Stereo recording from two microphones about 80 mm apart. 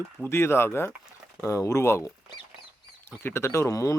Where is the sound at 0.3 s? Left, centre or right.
Left.